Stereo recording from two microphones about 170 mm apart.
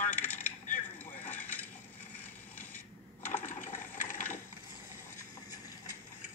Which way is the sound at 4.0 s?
50° left (ahead or behind).